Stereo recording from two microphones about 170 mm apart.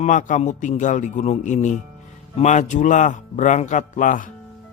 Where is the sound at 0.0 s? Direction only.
50° left (ahead or behind).